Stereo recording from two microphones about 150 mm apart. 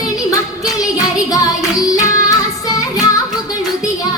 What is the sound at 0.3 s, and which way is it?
Music, 25° left (ahead or behind).